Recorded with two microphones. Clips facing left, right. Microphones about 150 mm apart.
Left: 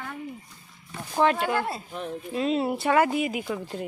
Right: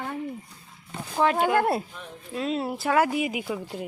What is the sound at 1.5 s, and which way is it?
Speech, 55° right (ahead or behind).